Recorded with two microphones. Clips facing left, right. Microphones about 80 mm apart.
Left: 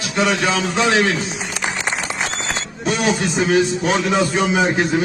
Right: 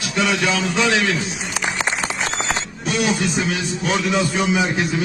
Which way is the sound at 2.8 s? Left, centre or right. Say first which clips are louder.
Left 3 dB; left.